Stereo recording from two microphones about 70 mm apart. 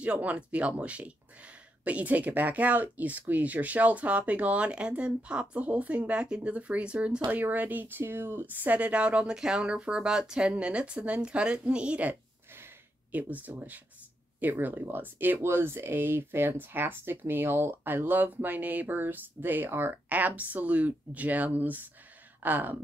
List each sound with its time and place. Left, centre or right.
0.0 s speech: right
8.7 s speech: centre